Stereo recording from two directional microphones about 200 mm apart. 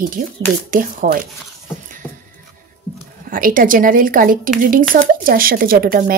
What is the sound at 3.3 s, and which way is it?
Speech, 45° right (ahead or behind).